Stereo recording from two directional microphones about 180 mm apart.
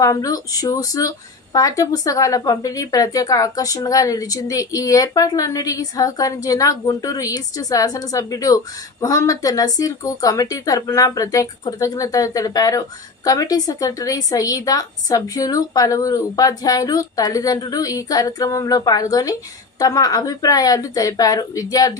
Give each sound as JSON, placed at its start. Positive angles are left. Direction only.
{"t": 0.0, "sound": "speech", "side_deg": 20}